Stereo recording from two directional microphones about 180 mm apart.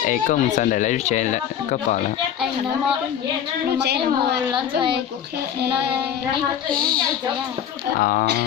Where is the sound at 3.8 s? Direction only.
65° right (ahead or behind).